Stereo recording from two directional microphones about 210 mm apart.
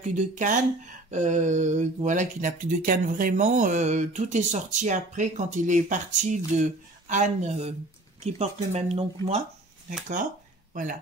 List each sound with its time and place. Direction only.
0.0 s speech: 35° right (ahead or behind)
10.7 s speech: 40° right (ahead or behind)